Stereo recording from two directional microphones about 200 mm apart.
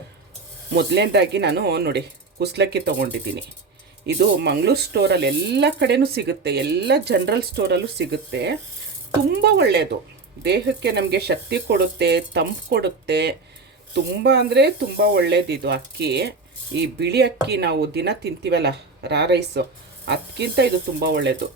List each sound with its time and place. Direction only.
0.7 s speech: 55° right (ahead or behind)